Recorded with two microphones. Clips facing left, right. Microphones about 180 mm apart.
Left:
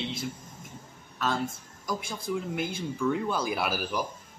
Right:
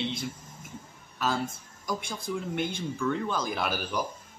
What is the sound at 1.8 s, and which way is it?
Speech, centre (ahead or behind).